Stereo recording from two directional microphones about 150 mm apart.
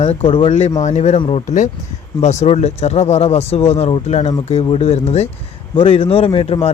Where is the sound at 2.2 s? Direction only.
50° left (ahead or behind).